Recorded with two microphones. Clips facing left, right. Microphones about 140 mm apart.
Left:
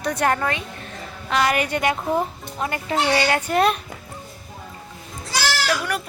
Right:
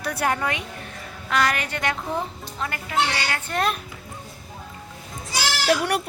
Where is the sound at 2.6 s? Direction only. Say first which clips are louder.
Left 2 dB; 25° left (ahead or behind).